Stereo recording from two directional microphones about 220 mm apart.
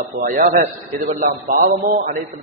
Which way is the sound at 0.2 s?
40° right (ahead or behind).